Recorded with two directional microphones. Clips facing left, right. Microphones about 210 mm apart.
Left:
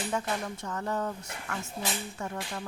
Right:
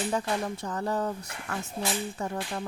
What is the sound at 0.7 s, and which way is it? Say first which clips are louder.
Speech: right 2 dB; 35° right (ahead or behind).